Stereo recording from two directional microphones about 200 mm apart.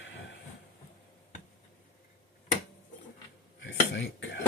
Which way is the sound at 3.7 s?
65° left (ahead or behind).